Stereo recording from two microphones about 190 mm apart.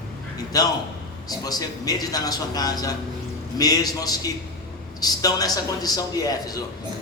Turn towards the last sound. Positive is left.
turn(degrees=20)  # may be behind; listen again after turning